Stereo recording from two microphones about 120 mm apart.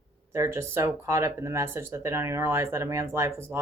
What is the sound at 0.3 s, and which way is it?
Speech, 25° right (ahead or behind).